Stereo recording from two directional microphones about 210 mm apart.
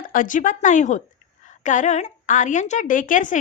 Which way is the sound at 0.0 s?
40° left (ahead or behind).